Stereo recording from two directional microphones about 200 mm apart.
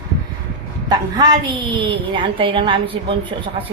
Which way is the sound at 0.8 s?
20° right (ahead or behind).